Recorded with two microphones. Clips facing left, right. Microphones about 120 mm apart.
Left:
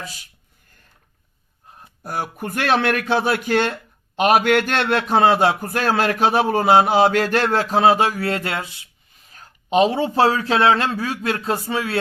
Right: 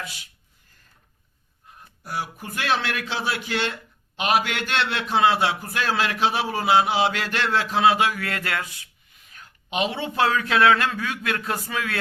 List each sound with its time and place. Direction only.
0.0 s a man's voice: 40° left (ahead or behind)
2.0 s a man's voice: 50° left (ahead or behind); by 8.9 s 25° left (ahead or behind)
9.3 s a man's voice: 35° left (ahead or behind)